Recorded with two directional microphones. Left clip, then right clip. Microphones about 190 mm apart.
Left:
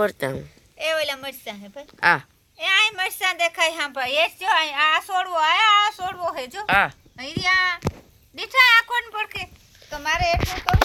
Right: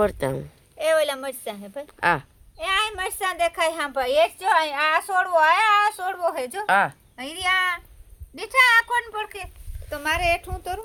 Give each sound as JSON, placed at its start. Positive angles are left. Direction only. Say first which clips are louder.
{"t": 0.0, "sound": "a woman's voice", "louder": "even", "side_deg": 0}
{"t": 0.8, "sound": "a woman's voice", "louder": "right 3 dB", "side_deg": -40}
{"t": 2.0, "sound": "a woman's voice", "louder": "left 3 dB", "side_deg": 0}
{"t": 2.6, "sound": "a woman's voice", "louder": "left 4 dB", "side_deg": -40}
{"t": 6.7, "sound": "a woman's voice", "louder": "left 1 dB", "side_deg": 15}
{"t": 7.2, "sound": "a woman's voice", "louder": "left 2 dB", "side_deg": -20}
{"t": 9.9, "sound": "a woman's voice", "louder": "left 1 dB", "side_deg": -60}